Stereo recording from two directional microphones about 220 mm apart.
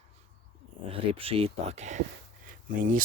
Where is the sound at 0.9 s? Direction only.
25° right (ahead or behind).